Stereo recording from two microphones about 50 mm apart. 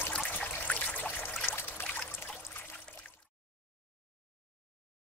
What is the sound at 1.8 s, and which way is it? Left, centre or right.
Trickle, left.